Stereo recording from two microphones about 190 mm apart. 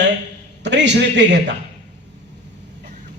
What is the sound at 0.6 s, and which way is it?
Speech, 65° right (ahead or behind).